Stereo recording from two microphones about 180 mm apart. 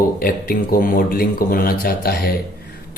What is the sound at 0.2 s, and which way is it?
Speech, 55° left (ahead or behind).